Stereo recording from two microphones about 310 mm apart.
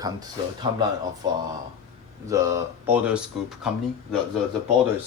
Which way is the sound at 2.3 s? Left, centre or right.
Centre.